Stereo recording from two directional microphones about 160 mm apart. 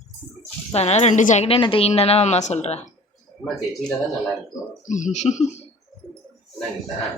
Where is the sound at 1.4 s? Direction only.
35° left (ahead or behind).